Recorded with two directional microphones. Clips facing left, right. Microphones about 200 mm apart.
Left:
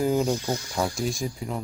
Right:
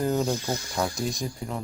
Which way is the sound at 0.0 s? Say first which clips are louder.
Left 2 dB; 5° left (ahead or behind).